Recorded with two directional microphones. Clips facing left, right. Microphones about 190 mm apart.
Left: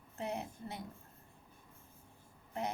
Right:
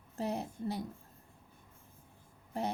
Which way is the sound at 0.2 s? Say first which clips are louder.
Right 4 dB; 35° right (ahead or behind).